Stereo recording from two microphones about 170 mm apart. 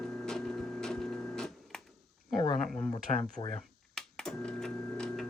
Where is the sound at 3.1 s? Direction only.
30° left (ahead or behind).